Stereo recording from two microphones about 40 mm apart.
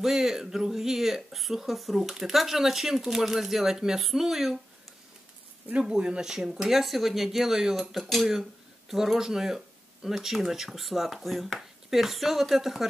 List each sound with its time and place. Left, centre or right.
0.0 s speech: centre
5.8 s speech: right
7.9 s speech: centre